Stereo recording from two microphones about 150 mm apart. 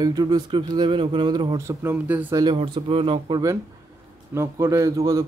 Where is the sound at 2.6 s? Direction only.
35° right (ahead or behind).